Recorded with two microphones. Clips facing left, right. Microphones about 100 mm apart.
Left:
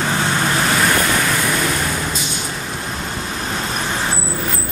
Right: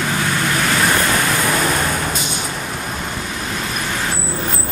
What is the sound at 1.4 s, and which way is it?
Vehicle, 35° right (ahead or behind).